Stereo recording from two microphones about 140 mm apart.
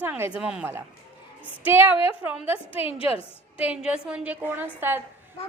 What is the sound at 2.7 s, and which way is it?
Speech, 40° left (ahead or behind).